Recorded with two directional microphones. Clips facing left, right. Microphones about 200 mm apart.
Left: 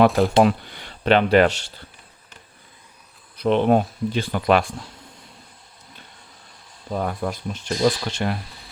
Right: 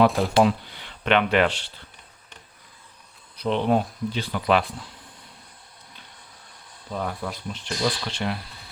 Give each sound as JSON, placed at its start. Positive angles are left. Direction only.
{"t": 0.3, "sound": "speech", "side_deg": 50}
{"t": 3.3, "sound": "speech", "side_deg": 50}
{"t": 6.9, "sound": "speech", "side_deg": 50}